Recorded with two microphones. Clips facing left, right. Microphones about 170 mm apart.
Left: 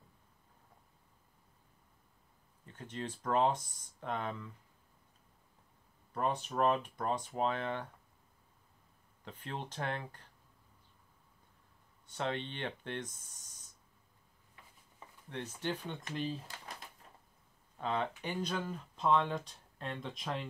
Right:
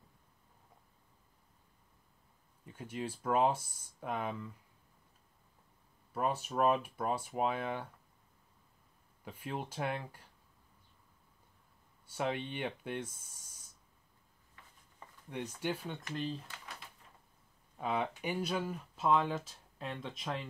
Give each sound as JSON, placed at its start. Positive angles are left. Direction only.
{"t": 2.6, "sound": "speech", "side_deg": -10}
{"t": 6.1, "sound": "speech", "side_deg": -5}
{"t": 9.2, "sound": "speech", "side_deg": -10}
{"t": 12.1, "sound": "speech", "side_deg": -10}
{"t": 15.2, "sound": "speech", "side_deg": -10}
{"t": 16.4, "sound": "pigeon", "side_deg": 35}
{"t": 17.7, "sound": "speech", "side_deg": -10}